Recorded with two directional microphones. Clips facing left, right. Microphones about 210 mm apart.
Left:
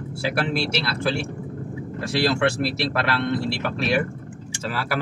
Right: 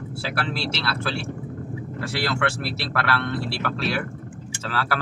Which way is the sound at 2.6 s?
20° left (ahead or behind).